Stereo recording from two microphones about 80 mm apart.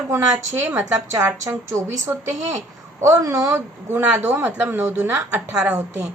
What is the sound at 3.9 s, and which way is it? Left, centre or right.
Speech, right.